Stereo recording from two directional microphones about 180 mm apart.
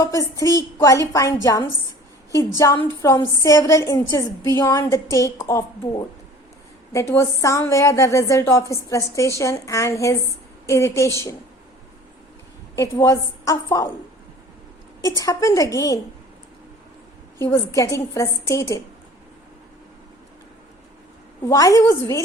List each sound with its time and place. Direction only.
0.0 s a woman's voice: 20° left (ahead or behind)
2.6 s a woman's voice: 20° left (ahead or behind)
6.9 s a woman's voice: 15° left (ahead or behind)
12.7 s a woman's voice: 15° left (ahead or behind)
15.2 s a woman's voice: 15° left (ahead or behind)
17.3 s a woman's voice: 15° left (ahead or behind)
21.4 s a woman's voice: 20° left (ahead or behind)